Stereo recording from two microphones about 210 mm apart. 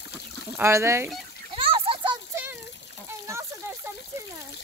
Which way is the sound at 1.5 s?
25° right (ahead or behind).